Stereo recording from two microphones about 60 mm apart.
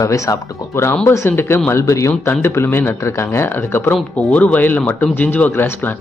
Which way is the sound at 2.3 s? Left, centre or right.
Left.